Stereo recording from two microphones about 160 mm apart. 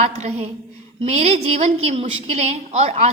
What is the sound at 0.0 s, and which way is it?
A woman's voice, 45° right (ahead or behind).